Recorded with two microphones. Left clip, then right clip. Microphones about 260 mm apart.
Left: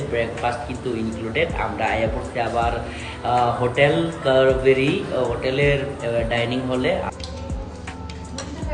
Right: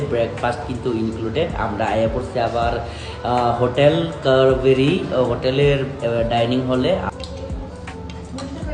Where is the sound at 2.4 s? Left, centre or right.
Centre.